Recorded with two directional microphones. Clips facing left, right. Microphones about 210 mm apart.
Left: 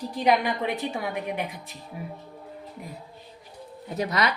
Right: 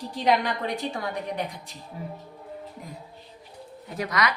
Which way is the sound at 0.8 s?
15° left (ahead or behind).